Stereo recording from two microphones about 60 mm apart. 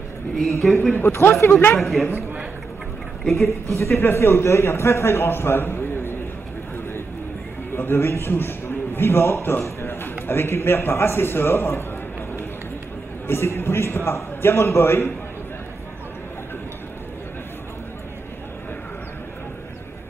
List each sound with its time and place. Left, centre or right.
0.4 s speech: centre
0.9 s speech: left
1.8 s speech: centre
3.4 s a man's voice: left
7.7 s a man's voice: left
13.3 s a man's voice: left